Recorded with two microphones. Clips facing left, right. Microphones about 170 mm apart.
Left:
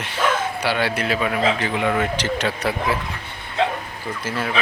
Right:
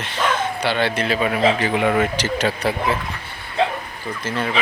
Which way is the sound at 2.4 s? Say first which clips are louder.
Right 2 dB; 30° right (ahead or behind).